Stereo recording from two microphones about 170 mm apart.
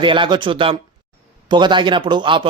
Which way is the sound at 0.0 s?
30° right (ahead or behind).